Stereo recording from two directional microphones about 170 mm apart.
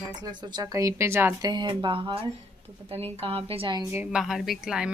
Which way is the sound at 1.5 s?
25° right (ahead or behind).